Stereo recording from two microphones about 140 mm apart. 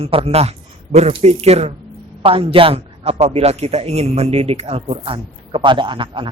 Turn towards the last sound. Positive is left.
turn(degrees=-35)  # may be behind; listen again after turning